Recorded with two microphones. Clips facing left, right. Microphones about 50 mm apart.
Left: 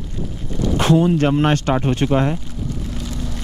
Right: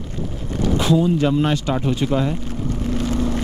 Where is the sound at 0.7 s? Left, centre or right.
Left.